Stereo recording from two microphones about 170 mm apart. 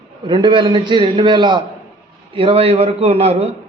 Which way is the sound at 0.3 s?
30° right (ahead or behind).